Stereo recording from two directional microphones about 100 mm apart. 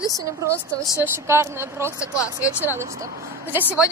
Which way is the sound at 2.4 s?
15° right (ahead or behind).